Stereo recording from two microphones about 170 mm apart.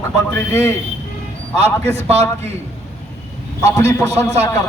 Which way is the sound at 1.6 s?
40° right (ahead or behind).